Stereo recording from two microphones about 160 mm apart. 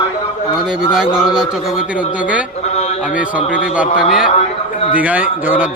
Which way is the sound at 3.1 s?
10° right (ahead or behind).